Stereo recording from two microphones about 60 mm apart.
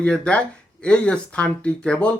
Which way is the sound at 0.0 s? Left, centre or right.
Centre.